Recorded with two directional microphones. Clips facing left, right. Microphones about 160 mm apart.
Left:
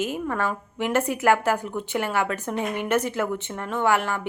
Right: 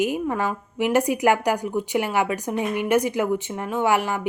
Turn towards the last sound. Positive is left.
turn(degrees=-15)  # may be behind; listen again after turning